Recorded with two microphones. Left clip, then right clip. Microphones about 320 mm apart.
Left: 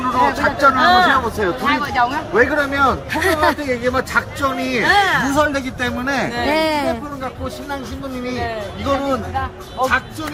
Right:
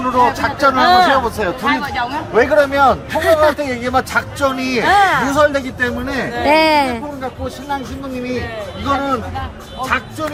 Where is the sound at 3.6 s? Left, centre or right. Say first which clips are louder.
Right 2 dB; right.